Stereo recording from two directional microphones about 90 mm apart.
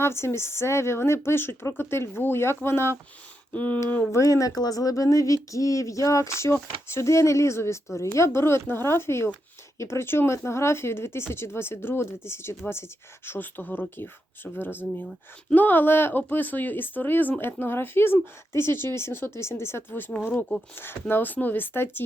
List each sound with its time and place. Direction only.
0.0 s speech: 30° left (ahead or behind)
4.1 s speech: 35° left (ahead or behind)